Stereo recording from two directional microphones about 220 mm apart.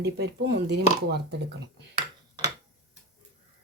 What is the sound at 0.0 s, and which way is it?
Speech, 50° right (ahead or behind).